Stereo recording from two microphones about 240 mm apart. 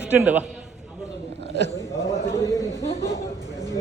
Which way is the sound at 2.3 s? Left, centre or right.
Centre.